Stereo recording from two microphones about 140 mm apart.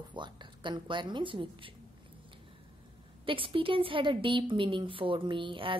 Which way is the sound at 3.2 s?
40° right (ahead or behind).